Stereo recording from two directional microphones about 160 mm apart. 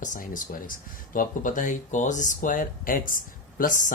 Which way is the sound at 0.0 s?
55° left (ahead or behind).